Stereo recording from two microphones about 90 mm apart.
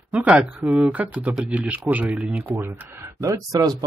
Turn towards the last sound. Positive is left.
turn(degrees=-45)  # may be behind; listen again after turning